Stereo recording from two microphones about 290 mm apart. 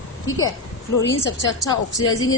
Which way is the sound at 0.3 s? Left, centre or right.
Left.